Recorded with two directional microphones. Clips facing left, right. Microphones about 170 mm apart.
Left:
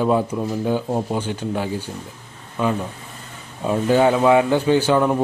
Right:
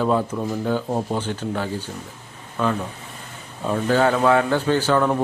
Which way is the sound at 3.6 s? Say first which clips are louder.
Left 3 dB; 15° left (ahead or behind).